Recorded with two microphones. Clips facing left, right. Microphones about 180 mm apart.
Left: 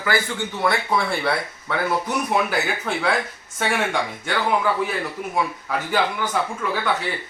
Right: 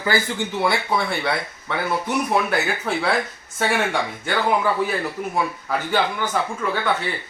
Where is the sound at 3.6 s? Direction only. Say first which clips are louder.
Right 2 dB; centre (ahead or behind).